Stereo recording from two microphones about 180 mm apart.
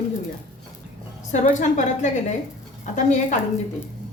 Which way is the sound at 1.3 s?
40° left (ahead or behind).